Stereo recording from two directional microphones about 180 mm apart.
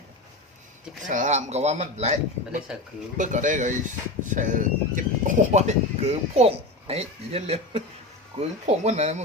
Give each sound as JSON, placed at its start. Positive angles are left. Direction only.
{"t": 1.0, "sound": "a man's voice", "side_deg": -45}